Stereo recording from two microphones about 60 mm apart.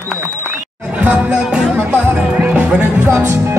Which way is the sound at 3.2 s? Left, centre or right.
Right.